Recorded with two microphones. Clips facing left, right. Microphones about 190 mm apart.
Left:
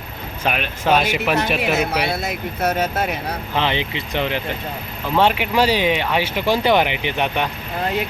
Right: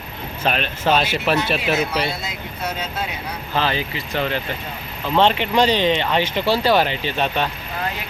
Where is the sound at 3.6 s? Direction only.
20° left (ahead or behind).